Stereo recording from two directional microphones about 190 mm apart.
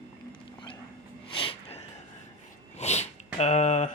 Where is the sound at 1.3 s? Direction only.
30° left (ahead or behind).